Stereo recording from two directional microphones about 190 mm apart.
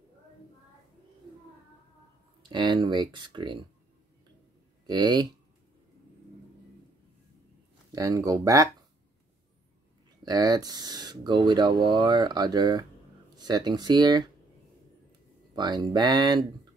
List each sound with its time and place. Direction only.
2.5 s speech: 25° right (ahead or behind)
4.8 s speech: 20° right (ahead or behind)
7.9 s speech: 20° right (ahead or behind)
10.2 s speech: 20° right (ahead or behind)
15.5 s speech: 25° right (ahead or behind)